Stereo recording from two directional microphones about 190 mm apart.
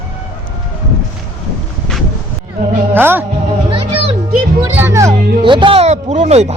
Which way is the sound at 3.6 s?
30° right (ahead or behind).